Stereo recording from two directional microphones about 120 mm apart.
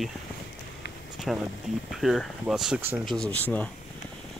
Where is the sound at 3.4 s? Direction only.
15° left (ahead or behind).